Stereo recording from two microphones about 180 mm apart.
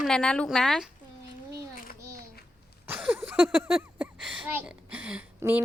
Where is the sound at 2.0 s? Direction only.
15° right (ahead or behind).